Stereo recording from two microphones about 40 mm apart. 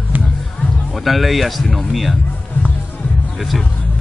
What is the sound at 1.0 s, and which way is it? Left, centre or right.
Speech, centre.